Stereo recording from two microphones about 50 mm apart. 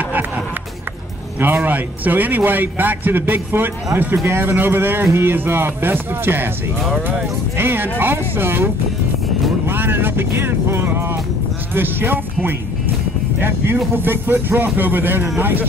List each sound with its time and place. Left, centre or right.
1.4 s a man's voice: right
7.5 s speech: right
9.7 s speech: right
13.9 s a man's voice: right